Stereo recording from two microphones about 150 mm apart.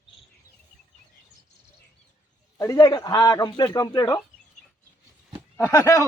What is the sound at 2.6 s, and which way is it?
A man's voice, 25° left (ahead or behind).